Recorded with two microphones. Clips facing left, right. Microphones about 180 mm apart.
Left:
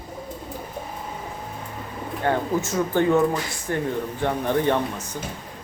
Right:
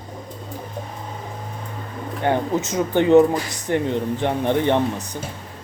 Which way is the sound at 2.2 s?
20° right (ahead or behind).